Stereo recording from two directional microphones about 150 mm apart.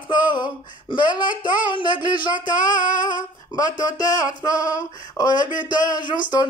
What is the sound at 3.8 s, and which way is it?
Music, 25° left (ahead or behind).